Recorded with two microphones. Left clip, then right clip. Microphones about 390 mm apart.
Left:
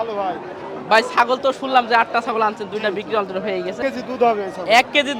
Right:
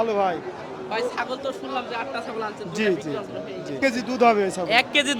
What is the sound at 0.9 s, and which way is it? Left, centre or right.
Speech, left.